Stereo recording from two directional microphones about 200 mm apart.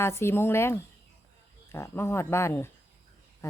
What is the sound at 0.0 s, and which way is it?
Speech, 10° left (ahead or behind).